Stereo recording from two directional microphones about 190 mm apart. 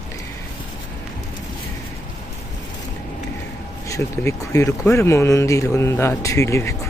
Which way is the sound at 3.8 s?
15° left (ahead or behind).